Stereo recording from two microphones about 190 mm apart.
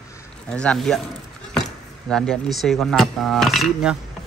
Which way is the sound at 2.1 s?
Centre (ahead or behind).